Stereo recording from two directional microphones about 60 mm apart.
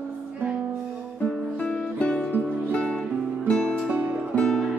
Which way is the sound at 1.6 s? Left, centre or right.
Left.